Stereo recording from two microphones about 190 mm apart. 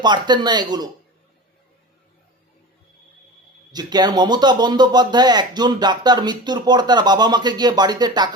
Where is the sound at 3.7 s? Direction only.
20° right (ahead or behind).